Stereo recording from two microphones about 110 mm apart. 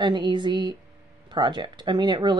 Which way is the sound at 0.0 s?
45° right (ahead or behind).